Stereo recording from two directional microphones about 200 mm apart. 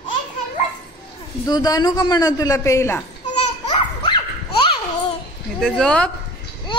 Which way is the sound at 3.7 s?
25° left (ahead or behind).